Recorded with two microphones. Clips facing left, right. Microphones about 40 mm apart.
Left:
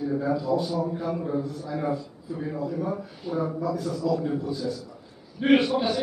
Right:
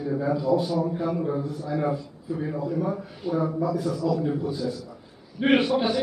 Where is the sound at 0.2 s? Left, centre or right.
Centre.